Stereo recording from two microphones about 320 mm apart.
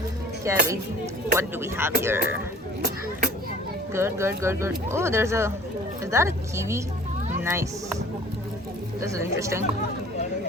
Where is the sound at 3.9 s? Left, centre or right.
Centre.